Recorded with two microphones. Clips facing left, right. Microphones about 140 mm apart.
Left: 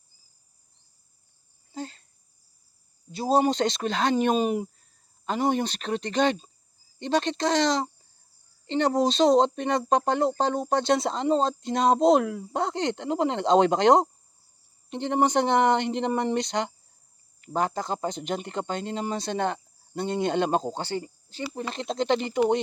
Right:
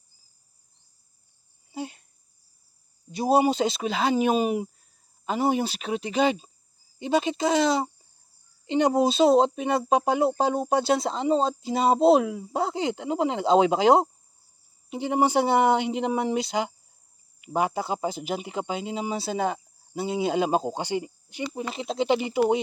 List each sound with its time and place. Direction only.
1.7 s cricket: 15° right (ahead or behind)
3.1 s speech: 15° right (ahead or behind)
21.6 s speech: 5° right (ahead or behind)